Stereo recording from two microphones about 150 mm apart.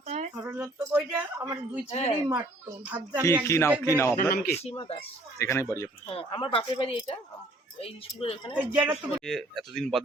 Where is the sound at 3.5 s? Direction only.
15° left (ahead or behind).